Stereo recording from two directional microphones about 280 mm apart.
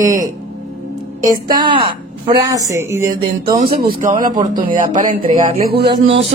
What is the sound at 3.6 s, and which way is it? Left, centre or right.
Speech, right.